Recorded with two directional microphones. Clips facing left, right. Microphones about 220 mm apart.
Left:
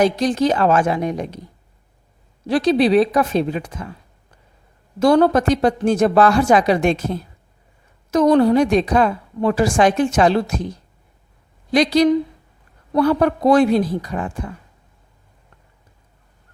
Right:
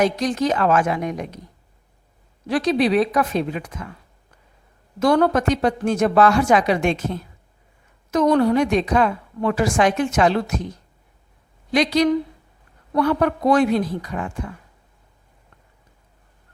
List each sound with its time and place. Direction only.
0.0 s a woman's voice: 30° left (ahead or behind)
2.5 s a woman's voice: 30° left (ahead or behind)
4.9 s a woman's voice: 30° left (ahead or behind)
11.7 s a woman's voice: 35° left (ahead or behind)